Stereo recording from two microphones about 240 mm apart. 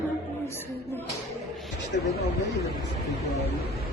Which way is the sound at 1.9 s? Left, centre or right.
Left.